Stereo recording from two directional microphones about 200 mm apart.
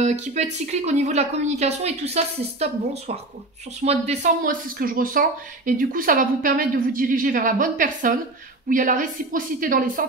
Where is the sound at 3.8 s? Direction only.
35° right (ahead or behind).